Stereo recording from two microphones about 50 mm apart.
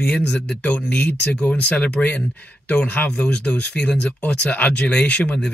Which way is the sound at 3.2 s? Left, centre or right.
Left.